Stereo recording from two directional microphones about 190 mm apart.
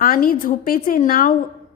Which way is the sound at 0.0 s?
50° left (ahead or behind).